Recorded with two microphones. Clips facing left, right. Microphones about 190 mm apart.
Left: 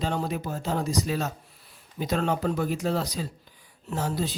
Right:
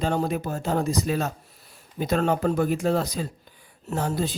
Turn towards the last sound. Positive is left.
turn(degrees=-55)  # may be behind; listen again after turning